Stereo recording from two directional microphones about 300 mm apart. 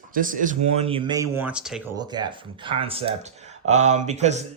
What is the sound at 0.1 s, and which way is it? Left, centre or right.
Speech, right.